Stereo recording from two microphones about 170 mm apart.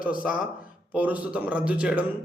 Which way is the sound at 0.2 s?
5° right (ahead or behind).